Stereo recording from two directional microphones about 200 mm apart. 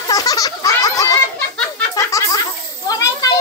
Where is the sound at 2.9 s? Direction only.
15° left (ahead or behind).